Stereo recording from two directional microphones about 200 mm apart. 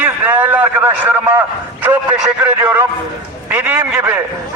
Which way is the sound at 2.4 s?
10° right (ahead or behind).